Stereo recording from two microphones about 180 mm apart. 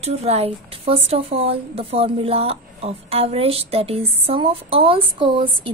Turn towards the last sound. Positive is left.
turn(degrees=-30)  # may be behind; listen again after turning